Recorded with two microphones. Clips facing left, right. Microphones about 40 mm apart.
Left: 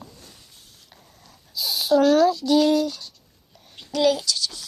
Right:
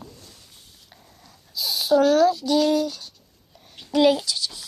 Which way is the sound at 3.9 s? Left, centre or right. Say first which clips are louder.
Right 2 dB; centre.